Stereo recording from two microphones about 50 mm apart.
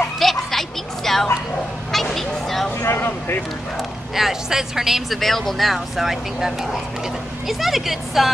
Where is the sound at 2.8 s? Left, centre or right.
Left.